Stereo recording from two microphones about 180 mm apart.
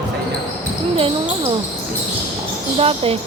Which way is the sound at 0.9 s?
30° right (ahead or behind).